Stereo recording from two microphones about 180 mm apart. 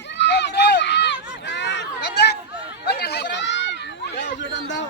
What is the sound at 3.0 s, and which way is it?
Chatter, 70° left (ahead or behind).